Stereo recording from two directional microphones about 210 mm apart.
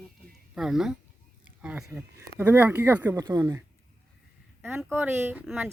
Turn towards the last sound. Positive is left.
turn(degrees=-10)  # may be behind; listen again after turning